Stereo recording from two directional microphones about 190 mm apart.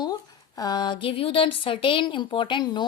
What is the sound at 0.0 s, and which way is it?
A woman's voice, 20° left (ahead or behind).